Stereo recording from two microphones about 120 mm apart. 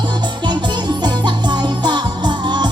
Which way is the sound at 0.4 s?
40° right (ahead or behind).